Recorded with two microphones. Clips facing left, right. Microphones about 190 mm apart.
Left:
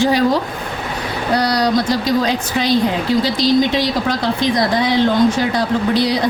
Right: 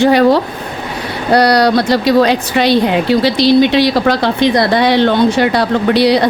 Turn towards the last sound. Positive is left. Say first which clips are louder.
# right 5 dB
turn(degrees=-70)  # may be behind; listen again after turning